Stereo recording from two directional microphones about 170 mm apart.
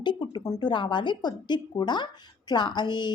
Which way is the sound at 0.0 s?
25° left (ahead or behind).